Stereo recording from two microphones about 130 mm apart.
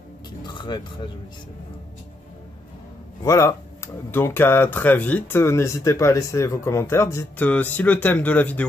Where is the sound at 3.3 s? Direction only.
20° left (ahead or behind).